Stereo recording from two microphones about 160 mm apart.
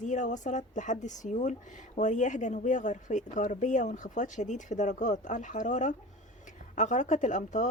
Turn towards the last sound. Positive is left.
turn(degrees=50)  # may be behind; listen again after turning